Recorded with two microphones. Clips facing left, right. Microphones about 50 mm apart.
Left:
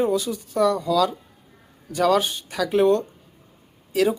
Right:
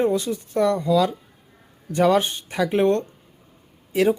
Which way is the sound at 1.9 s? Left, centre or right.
Centre.